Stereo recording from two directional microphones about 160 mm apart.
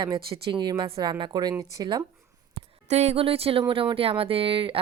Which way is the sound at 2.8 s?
45° right (ahead or behind).